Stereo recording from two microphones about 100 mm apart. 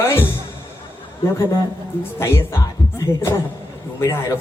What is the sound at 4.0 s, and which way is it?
Speech, 30° left (ahead or behind).